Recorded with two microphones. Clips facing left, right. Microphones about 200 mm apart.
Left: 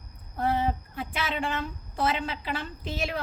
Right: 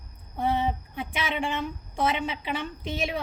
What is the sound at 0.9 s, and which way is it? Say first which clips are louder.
A woman's voice: right 1 dB; 10° right (ahead or behind).